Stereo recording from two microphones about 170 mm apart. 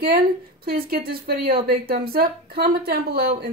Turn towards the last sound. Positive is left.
turn(degrees=-60)  # may be behind; listen again after turning